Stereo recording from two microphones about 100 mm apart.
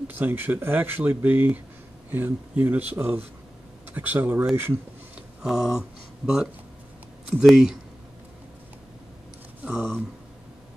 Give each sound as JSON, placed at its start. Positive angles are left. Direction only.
{"t": 0.1, "sound": "speech", "side_deg": -20}
{"t": 5.1, "sound": "speech", "side_deg": -5}
{"t": 9.7, "sound": "speech", "side_deg": 0}